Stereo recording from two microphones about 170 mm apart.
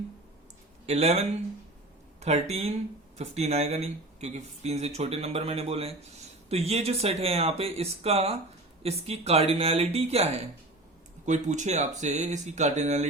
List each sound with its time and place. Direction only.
0.9 s speech: 40° right (ahead or behind)
2.2 s speech: 40° right (ahead or behind)